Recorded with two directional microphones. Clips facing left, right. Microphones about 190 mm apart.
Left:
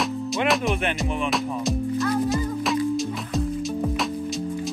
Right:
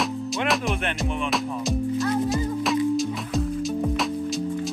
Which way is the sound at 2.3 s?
Centre (ahead or behind).